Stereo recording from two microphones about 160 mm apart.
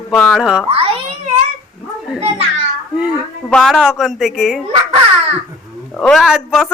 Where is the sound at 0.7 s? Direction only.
35° right (ahead or behind).